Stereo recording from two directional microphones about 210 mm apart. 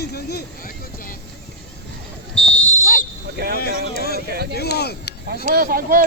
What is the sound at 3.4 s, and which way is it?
Speech, 45° right (ahead or behind).